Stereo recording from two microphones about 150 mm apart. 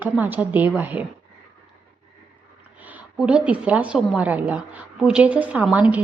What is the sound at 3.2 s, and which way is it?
A woman's voice, 5° right (ahead or behind).